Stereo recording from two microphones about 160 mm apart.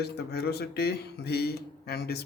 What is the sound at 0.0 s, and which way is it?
A man's voice, 90° left.